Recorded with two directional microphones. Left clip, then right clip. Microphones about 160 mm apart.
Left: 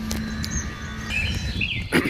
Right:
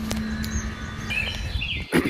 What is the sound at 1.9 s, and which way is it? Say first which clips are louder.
Pig: left 1 dB; centre (ahead or behind).